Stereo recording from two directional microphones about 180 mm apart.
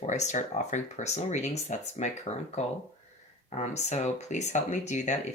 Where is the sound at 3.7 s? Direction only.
40° left (ahead or behind).